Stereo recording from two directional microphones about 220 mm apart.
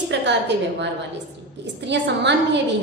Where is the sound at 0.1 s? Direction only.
50° right (ahead or behind).